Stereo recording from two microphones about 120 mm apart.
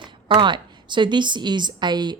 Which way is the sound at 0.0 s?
40° right (ahead or behind).